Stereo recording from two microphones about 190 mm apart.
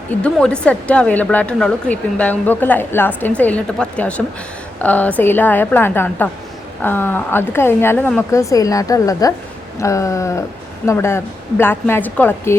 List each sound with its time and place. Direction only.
0.1 s a woman's voice: 5° left (ahead or behind)